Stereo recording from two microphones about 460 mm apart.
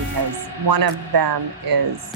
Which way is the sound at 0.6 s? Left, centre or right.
Right.